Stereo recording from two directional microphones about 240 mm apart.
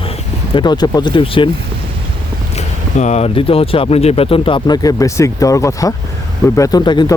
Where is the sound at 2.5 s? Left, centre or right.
Left.